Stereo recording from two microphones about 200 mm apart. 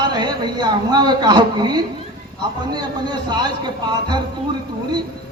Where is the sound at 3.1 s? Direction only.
20° right (ahead or behind).